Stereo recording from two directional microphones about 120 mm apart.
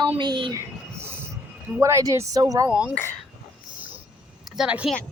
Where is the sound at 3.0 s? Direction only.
10° left (ahead or behind).